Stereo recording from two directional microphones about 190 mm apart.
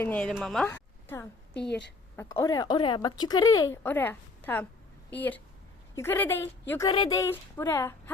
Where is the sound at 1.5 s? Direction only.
65° left (ahead or behind).